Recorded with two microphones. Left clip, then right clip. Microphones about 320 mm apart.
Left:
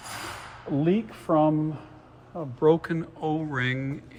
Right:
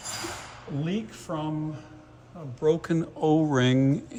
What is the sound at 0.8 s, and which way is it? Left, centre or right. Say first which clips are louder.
Speech: left 8 dB; centre.